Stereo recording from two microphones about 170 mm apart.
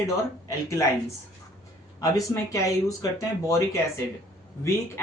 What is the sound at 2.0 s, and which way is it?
Speech, 20° left (ahead or behind).